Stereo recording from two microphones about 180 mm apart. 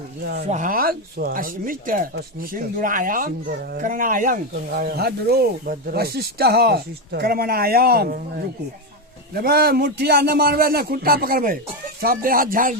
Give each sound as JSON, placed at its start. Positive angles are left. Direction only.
{"t": 0.2, "sound": "speech", "side_deg": -60}
{"t": 0.4, "sound": "speech", "side_deg": -45}